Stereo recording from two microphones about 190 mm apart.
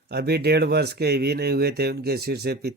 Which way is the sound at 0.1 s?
60° right (ahead or behind).